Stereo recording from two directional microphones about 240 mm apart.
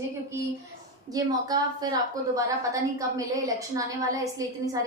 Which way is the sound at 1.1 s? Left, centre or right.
Centre.